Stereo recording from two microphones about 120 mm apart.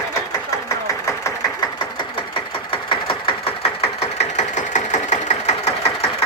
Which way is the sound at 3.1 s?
55° left (ahead or behind).